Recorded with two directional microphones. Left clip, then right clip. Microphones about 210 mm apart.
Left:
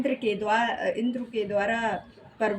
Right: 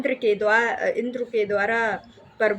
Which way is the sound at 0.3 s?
20° right (ahead or behind).